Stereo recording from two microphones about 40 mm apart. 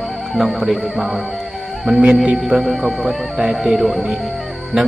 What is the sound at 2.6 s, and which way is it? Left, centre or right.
A man's voice, centre.